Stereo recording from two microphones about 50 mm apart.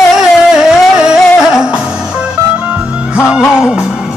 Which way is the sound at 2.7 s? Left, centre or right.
Right.